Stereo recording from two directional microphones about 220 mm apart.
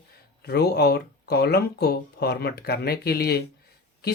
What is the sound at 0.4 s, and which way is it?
Speech, 45° left (ahead or behind).